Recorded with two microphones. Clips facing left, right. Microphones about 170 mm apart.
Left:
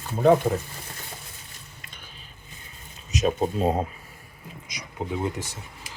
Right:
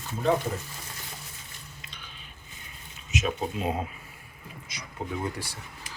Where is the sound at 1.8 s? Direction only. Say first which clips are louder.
Left 1 dB; 50° left (ahead or behind).